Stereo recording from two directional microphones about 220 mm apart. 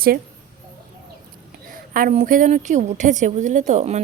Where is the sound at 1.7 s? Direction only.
40° right (ahead or behind).